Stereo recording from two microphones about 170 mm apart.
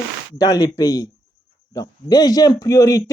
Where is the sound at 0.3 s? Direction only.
20° left (ahead or behind).